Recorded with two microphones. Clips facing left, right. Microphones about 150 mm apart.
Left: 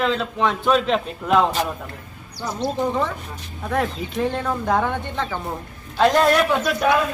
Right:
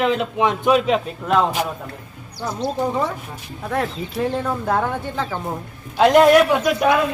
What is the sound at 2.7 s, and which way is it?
Speech, 10° right (ahead or behind).